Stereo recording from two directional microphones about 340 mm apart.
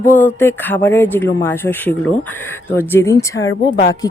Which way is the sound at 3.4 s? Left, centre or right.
Left.